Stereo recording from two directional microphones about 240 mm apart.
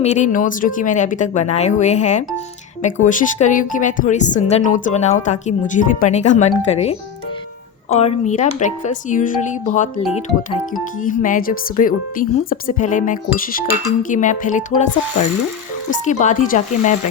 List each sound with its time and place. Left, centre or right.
0.0 s speech: left